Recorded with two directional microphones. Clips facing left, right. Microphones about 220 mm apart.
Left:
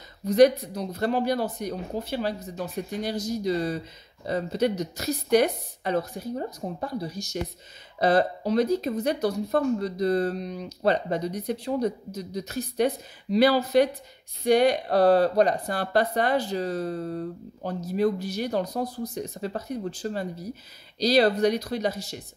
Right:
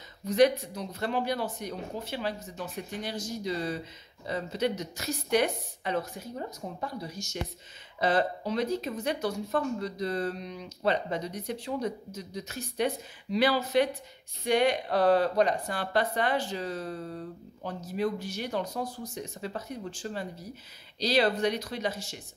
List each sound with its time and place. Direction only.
0.2 s speech: 35° left (ahead or behind)